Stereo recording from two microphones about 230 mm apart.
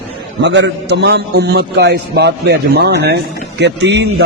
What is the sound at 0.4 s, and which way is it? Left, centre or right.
A man's voice, right.